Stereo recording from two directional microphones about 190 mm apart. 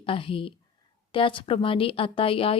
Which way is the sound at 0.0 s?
30° left (ahead or behind).